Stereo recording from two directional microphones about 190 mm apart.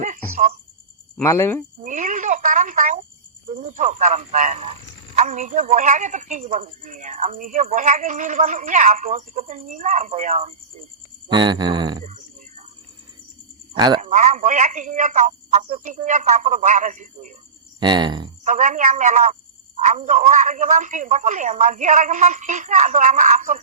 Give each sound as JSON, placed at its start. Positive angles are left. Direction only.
{"t": 0.0, "sound": "cricket", "side_deg": -45}
{"t": 1.2, "sound": "speech", "side_deg": 15}
{"t": 1.8, "sound": "a woman's voice", "side_deg": -40}
{"t": 11.3, "sound": "speech", "side_deg": -25}
{"t": 12.0, "sound": "cricket", "side_deg": -40}
{"t": 13.7, "sound": "cricket", "side_deg": -20}
{"t": 14.0, "sound": "a woman's voice", "side_deg": -40}
{"t": 17.7, "sound": "speech", "side_deg": -25}
{"t": 18.4, "sound": "a woman's voice", "side_deg": -40}